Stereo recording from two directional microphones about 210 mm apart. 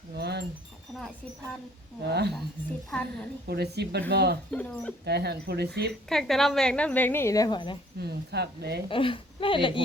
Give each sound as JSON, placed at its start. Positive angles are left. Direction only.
{"t": 0.2, "sound": "wind chime", "side_deg": -50}
{"t": 2.0, "sound": "speech", "side_deg": -50}
{"t": 2.9, "sound": "a woman's voice", "side_deg": 5}
{"t": 3.4, "sound": "speech", "side_deg": -50}
{"t": 4.5, "sound": "a woman's voice", "side_deg": 5}
{"t": 5.0, "sound": "speech", "side_deg": -50}
{"t": 6.1, "sound": "a woman's voice", "side_deg": 0}
{"t": 7.9, "sound": "speech", "side_deg": -50}
{"t": 8.9, "sound": "a woman's voice", "side_deg": 25}